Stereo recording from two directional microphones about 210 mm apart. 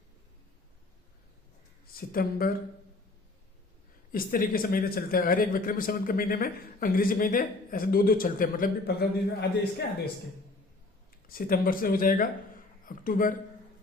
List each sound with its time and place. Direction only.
1.9 s speech: 45° left (ahead or behind)
4.1 s speech: 45° left (ahead or behind)
11.3 s a man's voice: 45° left (ahead or behind)